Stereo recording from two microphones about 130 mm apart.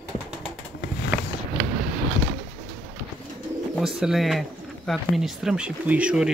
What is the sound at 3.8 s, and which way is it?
Speech, 5° right (ahead or behind).